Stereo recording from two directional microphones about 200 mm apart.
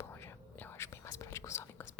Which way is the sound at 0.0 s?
10° left (ahead or behind).